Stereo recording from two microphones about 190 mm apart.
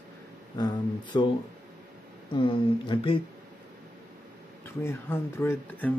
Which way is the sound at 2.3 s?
25° left (ahead or behind).